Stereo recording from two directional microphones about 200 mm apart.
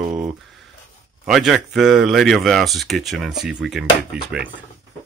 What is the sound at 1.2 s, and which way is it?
Speech, centre (ahead or behind).